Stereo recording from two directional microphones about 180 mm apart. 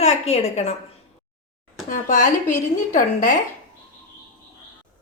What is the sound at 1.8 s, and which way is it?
Speech, 45° left (ahead or behind).